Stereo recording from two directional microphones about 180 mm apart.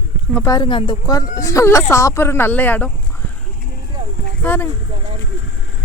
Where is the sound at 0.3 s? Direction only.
20° left (ahead or behind).